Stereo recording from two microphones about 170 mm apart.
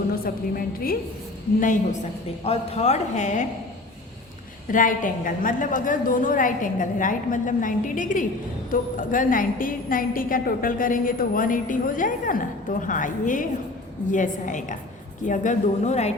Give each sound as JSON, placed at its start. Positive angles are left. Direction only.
{"t": 0.5, "sound": "a woman's voice", "side_deg": 60}
{"t": 2.4, "sound": "a woman's voice", "side_deg": 40}
{"t": 4.7, "sound": "a woman's voice", "side_deg": 50}